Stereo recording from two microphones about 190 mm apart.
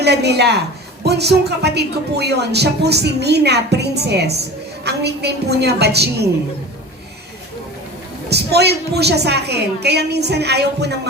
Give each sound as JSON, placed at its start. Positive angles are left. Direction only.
{"t": 0.0, "sound": "a woman's voice", "side_deg": -60}
{"t": 8.3, "sound": "a woman's voice", "side_deg": -60}